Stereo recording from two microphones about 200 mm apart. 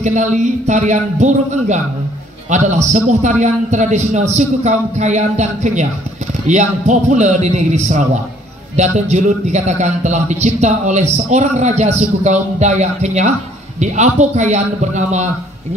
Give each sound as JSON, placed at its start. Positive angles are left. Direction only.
{"t": 0.0, "sound": "a man's voice", "side_deg": -35}